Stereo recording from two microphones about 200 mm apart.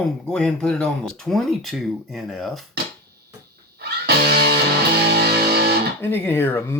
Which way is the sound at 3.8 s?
50° right (ahead or behind).